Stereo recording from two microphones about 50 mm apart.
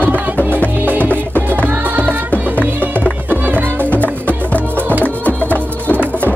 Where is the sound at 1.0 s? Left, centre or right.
Left.